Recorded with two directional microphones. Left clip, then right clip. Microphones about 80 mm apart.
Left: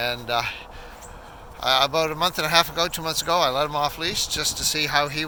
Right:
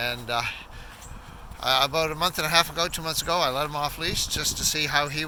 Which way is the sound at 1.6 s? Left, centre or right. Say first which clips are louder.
Left 3 dB; left.